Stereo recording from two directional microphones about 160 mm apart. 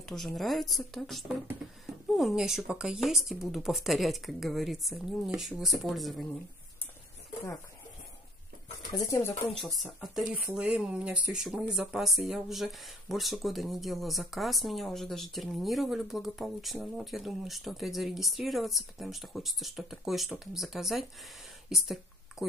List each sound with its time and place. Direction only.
0.0 s speech: 5° left (ahead or behind)
8.9 s speech: 20° left (ahead or behind)
9.5 s speech: centre (ahead or behind)